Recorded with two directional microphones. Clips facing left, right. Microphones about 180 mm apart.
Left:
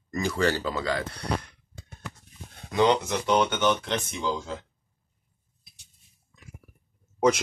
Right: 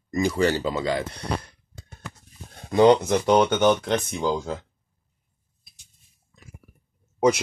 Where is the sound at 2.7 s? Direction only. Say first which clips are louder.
Right 6 dB; 35° right (ahead or behind).